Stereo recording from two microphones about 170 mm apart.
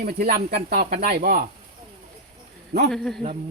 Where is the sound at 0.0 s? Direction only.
65° right (ahead or behind).